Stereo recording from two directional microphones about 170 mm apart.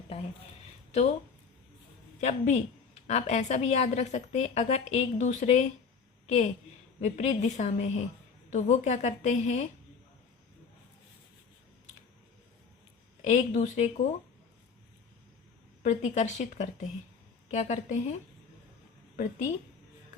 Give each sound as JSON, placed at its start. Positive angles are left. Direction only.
{"t": 0.9, "sound": "speech", "side_deg": 40}
{"t": 2.2, "sound": "a woman's voice", "side_deg": 40}
{"t": 13.2, "sound": "a woman's voice", "side_deg": 45}
{"t": 15.8, "sound": "a woman's voice", "side_deg": 45}